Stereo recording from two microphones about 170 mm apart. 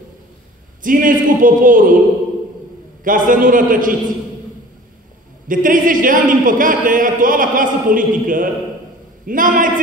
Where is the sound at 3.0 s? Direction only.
55° right (ahead or behind).